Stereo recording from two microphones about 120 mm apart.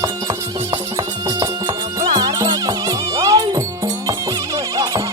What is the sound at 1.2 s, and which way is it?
Music, 40° right (ahead or behind).